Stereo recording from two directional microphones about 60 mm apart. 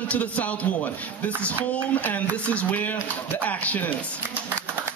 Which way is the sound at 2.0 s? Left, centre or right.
Left.